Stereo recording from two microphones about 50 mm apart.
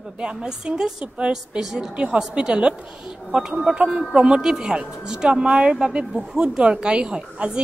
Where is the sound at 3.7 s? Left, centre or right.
Right.